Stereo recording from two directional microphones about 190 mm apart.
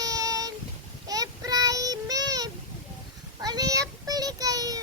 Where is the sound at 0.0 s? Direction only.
20° right (ahead or behind).